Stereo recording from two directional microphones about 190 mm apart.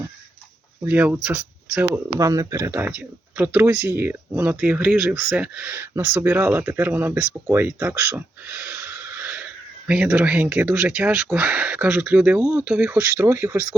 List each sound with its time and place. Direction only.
0.9 s speech: 10° right (ahead or behind)